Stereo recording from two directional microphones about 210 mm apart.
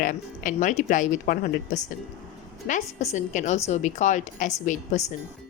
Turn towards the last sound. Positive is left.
turn(degrees=35)  # may be behind; listen again after turning